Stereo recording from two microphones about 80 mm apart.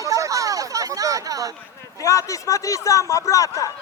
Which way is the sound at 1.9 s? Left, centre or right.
Left.